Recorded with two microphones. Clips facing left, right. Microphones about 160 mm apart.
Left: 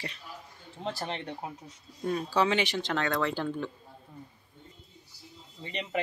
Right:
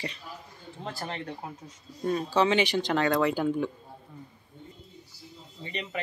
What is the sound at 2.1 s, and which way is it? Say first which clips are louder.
Speech: right 3 dB; centre (ahead or behind).